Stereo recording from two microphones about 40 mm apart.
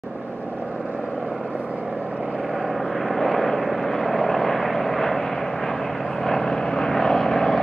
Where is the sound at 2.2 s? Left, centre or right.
Centre.